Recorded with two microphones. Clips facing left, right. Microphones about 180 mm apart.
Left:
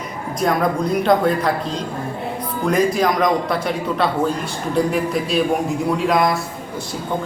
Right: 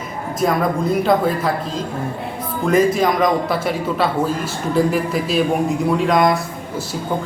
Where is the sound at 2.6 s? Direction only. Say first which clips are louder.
Right 2 dB; centre (ahead or behind).